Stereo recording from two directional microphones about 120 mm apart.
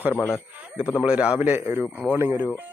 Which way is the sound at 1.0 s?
10° right (ahead or behind).